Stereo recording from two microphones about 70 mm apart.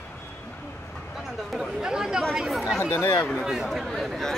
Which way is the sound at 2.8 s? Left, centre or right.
Left.